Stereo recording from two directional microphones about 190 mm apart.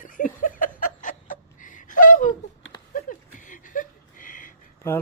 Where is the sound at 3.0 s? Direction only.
45° left (ahead or behind).